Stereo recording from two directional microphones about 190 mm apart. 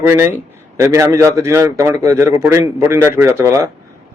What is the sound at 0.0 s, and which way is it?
A man's voice, 15° right (ahead or behind).